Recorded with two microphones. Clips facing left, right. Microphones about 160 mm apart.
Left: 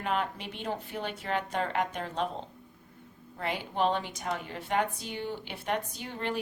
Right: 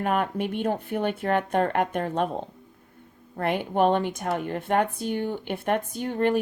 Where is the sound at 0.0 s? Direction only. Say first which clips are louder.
Right 7 dB; 55° right (ahead or behind).